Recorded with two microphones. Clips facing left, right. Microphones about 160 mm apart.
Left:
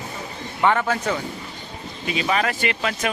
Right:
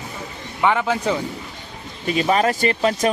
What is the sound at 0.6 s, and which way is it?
Speech, 15° right (ahead or behind).